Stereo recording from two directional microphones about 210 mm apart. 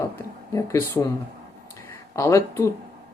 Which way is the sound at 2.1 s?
15° left (ahead or behind).